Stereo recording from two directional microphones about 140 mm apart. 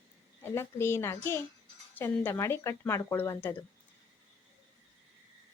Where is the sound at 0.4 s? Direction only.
15° left (ahead or behind).